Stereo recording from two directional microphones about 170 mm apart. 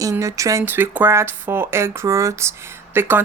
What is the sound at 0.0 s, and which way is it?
Speech, 20° right (ahead or behind).